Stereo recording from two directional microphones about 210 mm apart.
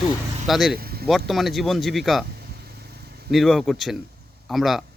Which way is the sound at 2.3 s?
50° right (ahead or behind).